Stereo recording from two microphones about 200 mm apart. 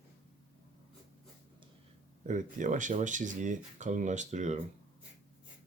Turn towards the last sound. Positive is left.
turn(degrees=-35)  # may be behind; listen again after turning